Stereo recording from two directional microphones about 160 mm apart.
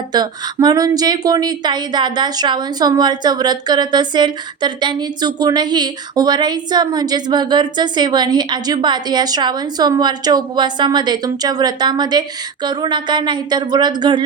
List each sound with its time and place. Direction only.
0.1 s speech: 25° right (ahead or behind)